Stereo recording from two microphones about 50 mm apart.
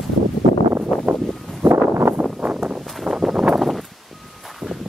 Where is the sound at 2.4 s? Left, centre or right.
Right.